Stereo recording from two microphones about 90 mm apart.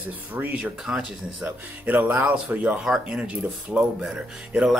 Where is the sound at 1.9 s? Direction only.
20° right (ahead or behind).